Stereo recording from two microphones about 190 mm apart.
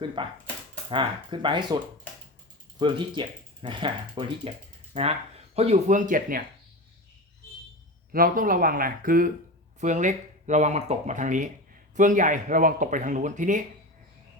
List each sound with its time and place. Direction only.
0.2 s speech: 25° right (ahead or behind); by 6.4 s 45° right (ahead or behind)
8.1 s speech: 45° right (ahead or behind)